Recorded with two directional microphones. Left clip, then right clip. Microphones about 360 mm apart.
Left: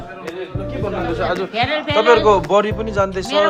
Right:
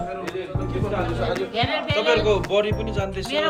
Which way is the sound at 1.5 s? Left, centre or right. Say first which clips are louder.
Left 5 dB; left.